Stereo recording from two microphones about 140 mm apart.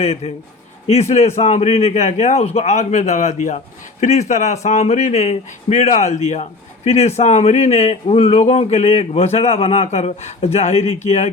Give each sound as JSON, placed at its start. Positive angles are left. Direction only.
{"t": 0.0, "sound": "speech", "side_deg": 45}